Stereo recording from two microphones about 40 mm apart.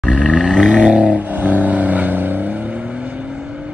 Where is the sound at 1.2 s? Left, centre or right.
Right.